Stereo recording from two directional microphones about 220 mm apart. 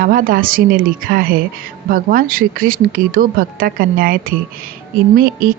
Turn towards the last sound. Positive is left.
turn(degrees=-40)  # may be behind; listen again after turning